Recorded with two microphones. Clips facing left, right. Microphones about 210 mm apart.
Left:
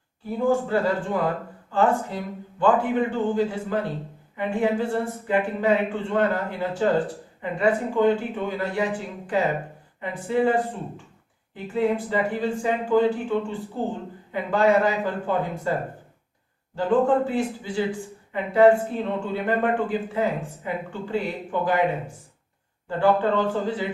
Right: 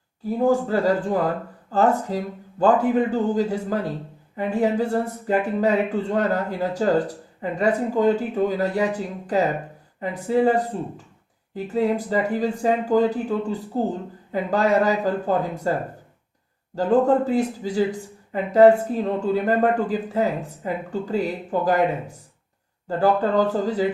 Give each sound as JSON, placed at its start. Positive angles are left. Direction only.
{"t": 0.3, "sound": "speech", "side_deg": -40}
{"t": 16.7, "sound": "speech", "side_deg": -40}